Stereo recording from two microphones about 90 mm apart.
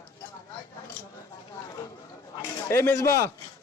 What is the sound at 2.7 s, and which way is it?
Speech, 30° left (ahead or behind).